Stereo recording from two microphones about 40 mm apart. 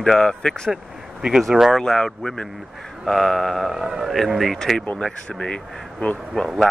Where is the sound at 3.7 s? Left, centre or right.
Centre.